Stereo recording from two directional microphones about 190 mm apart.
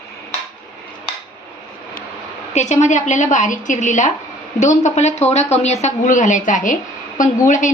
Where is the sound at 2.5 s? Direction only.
35° left (ahead or behind).